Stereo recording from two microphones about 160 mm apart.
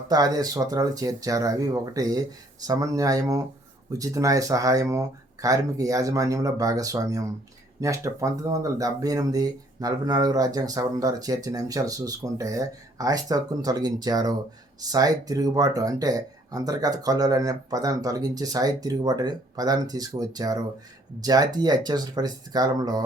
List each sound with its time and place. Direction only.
0.1 s speech: 25° right (ahead or behind)